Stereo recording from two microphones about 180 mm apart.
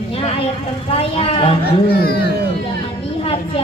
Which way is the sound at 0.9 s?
30° left (ahead or behind).